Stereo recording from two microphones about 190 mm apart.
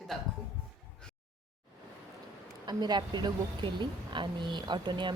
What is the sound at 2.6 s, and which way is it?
Speech, 20° right (ahead or behind).